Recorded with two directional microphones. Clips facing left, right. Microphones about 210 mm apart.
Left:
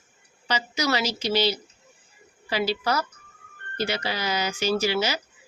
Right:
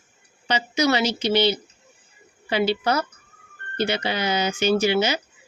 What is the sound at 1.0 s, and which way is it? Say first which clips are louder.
Speech: right 4 dB; 60° right (ahead or behind).